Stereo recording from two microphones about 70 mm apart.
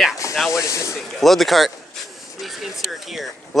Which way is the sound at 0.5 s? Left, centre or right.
Left.